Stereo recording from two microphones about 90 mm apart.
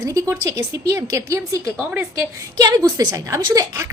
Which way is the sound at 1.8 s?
15° right (ahead or behind).